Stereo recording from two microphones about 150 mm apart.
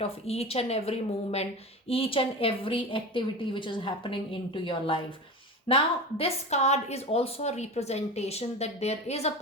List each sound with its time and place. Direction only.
0.0 s a woman's voice: 45° left (ahead or behind)